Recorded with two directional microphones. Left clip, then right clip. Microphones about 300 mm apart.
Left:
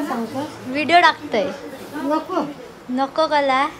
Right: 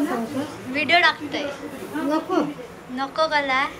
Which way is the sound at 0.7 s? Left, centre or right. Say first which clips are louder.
Left 4 dB; centre.